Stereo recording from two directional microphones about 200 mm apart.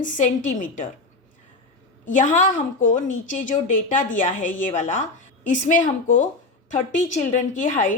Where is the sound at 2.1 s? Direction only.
40° left (ahead or behind).